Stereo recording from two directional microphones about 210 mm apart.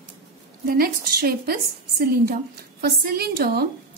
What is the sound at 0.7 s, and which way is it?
A woman's voice, 45° right (ahead or behind).